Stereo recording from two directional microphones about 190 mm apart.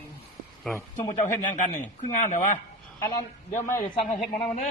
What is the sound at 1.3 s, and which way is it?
Speech, 40° left (ahead or behind).